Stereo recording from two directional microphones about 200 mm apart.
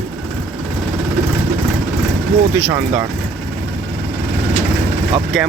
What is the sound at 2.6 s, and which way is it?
Speech, 10° right (ahead or behind).